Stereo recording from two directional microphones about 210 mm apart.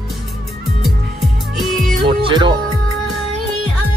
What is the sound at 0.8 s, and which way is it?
Music, centre (ahead or behind).